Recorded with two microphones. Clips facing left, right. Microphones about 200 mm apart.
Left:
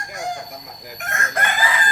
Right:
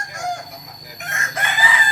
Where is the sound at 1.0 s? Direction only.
50° left (ahead or behind).